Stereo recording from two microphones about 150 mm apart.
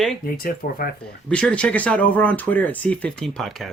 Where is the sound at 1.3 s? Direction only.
5° left (ahead or behind).